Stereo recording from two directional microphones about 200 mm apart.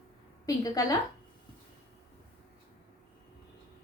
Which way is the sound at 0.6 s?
15° left (ahead or behind).